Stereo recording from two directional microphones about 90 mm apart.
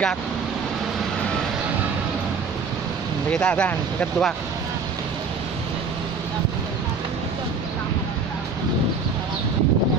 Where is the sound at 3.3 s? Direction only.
10° left (ahead or behind).